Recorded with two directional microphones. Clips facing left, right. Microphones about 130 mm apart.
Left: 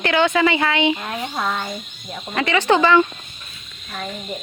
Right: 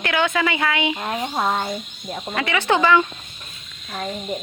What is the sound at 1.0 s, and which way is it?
Speech, 15° right (ahead or behind).